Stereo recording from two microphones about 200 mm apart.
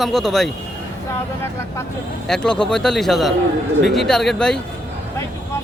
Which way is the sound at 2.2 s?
5° left (ahead or behind).